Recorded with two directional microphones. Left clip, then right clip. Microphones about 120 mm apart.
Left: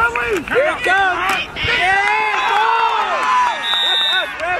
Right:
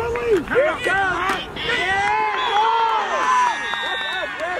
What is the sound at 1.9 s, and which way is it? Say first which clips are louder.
Run: left 3 dB; 40° left (ahead or behind).